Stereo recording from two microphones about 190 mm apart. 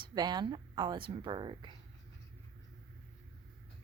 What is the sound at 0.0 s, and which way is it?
A woman's voice, 20° right (ahead or behind).